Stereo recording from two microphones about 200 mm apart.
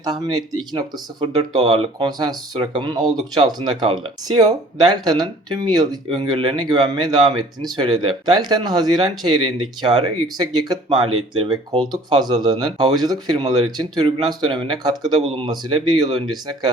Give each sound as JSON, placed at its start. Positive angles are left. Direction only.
{"t": 0.0, "sound": "speech", "side_deg": -20}